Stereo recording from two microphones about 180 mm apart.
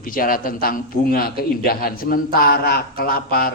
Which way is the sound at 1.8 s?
55° left (ahead or behind).